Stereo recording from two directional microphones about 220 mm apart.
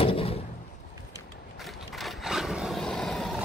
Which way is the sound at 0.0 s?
25° left (ahead or behind).